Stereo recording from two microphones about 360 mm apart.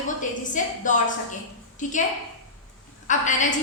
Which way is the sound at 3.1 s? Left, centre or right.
Left.